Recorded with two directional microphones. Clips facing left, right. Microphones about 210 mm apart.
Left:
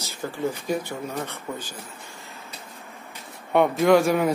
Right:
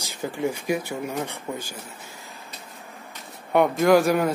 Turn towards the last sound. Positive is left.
turn(degrees=0)  # may be behind; listen again after turning